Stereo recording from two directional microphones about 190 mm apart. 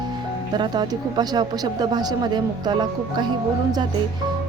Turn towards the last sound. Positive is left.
turn(degrees=-25)  # may be behind; listen again after turning